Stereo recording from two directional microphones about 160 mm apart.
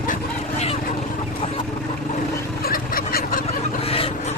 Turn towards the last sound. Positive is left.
turn(degrees=65)  # may be behind; listen again after turning